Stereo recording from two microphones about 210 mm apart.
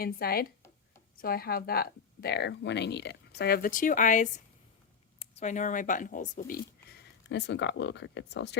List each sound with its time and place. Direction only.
0.0 s a woman's voice: 45° left (ahead or behind)
6.8 s speech: 55° left (ahead or behind)